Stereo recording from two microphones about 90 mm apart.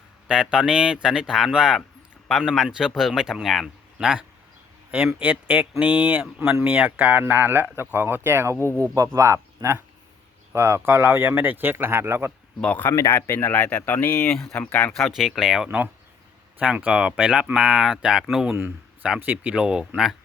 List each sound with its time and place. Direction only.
0.3 s speech: 10° right (ahead or behind)
2.2 s a man's voice: centre (ahead or behind)
3.9 s speech: 10° right (ahead or behind); by 8.5 s 25° right (ahead or behind)
8.5 s speech: 20° left (ahead or behind)
9.0 s speech: 35° right (ahead or behind)
12.6 s speech: 20° left (ahead or behind)
12.9 s speech: 30° left (ahead or behind)
14.9 s speech: centre (ahead or behind)